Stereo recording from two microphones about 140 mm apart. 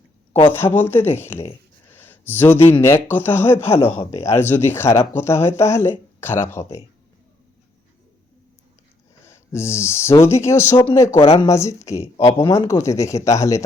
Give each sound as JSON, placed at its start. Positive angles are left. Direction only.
{"t": 0.5, "sound": "speech", "side_deg": 15}
{"t": 1.9, "sound": "a sound", "side_deg": 15}
{"t": 2.8, "sound": "speech", "side_deg": 15}
{"t": 9.2, "sound": "speech", "side_deg": 20}